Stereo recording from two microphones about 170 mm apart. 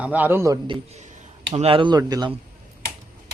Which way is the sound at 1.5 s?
35° right (ahead or behind).